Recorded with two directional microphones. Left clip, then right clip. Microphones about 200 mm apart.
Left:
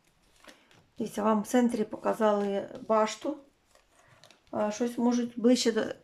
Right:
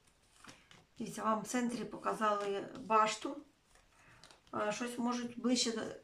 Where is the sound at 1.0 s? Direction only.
40° left (ahead or behind).